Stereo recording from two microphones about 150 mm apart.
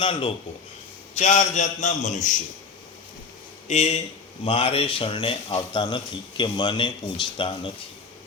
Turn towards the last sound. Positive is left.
turn(degrees=35)  # may be behind; listen again after turning